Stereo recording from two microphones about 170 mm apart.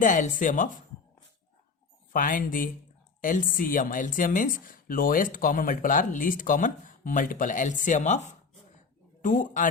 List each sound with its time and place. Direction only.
0.0 s speech: 50° left (ahead or behind)
2.1 s speech: 55° left (ahead or behind)